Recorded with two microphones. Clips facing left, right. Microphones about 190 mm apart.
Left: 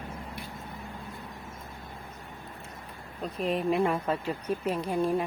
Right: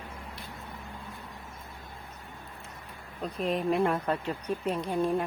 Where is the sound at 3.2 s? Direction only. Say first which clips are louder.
Even; centre (ahead or behind).